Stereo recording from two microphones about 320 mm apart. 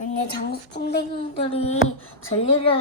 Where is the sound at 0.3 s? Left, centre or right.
Left.